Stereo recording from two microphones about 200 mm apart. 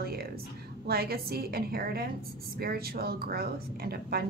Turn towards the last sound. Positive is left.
turn(degrees=-50)  # may be behind; listen again after turning